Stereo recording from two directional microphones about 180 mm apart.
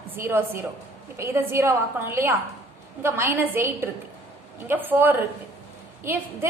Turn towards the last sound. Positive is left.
turn(degrees=-10)  # may be behind; listen again after turning